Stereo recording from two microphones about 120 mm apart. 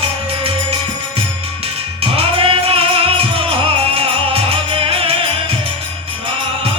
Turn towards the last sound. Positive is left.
turn(degrees=-50)  # may be behind; listen again after turning